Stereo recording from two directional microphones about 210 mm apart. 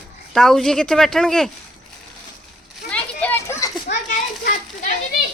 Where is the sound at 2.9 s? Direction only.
5° left (ahead or behind).